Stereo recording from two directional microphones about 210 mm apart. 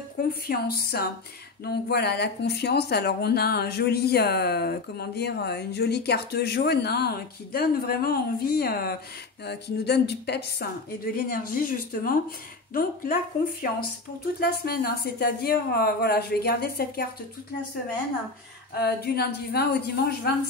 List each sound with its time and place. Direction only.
0.3 s speech: 45° left (ahead or behind)
18.8 s speech: 50° left (ahead or behind)